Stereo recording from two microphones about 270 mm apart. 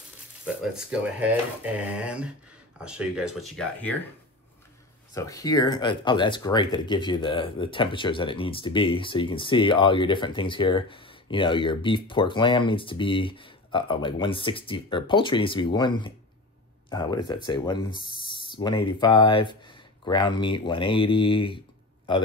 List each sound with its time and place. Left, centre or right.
0.7 s speech: centre
5.1 s speech: centre